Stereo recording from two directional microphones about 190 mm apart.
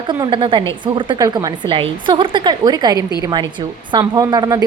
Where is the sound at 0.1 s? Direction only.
25° right (ahead or behind).